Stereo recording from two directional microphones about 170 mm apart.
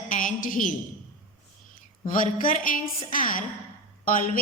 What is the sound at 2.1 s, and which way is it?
Speech, 50° left (ahead or behind).